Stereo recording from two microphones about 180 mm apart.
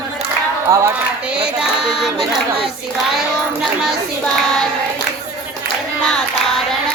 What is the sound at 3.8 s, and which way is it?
Speech, centre (ahead or behind).